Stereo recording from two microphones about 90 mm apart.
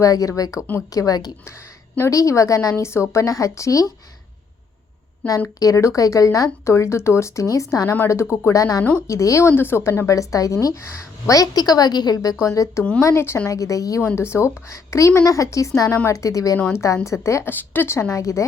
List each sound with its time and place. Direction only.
0.0 s a woman's voice: 40° left (ahead or behind)
5.2 s speech: 15° left (ahead or behind)
5.5 s a woman's voice: 40° left (ahead or behind)
13.5 s speech: 40° left (ahead or behind)
17.5 s speech: 20° left (ahead or behind)